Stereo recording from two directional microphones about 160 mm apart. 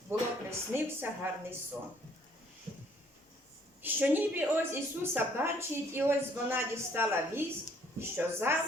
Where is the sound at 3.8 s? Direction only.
10° right (ahead or behind).